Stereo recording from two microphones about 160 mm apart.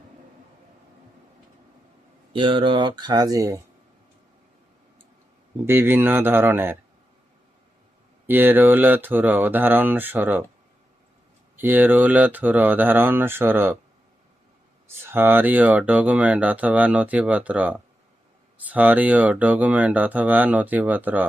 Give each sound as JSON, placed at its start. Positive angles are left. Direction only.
{"t": 2.3, "sound": "speech", "side_deg": -30}
{"t": 5.6, "sound": "speech", "side_deg": -15}
{"t": 8.3, "sound": "speech", "side_deg": -10}
{"t": 11.5, "sound": "speech", "side_deg": -10}
{"t": 15.0, "sound": "speech", "side_deg": -15}